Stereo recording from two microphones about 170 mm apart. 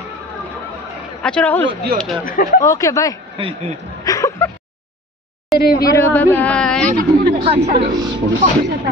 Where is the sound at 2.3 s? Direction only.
55° left (ahead or behind).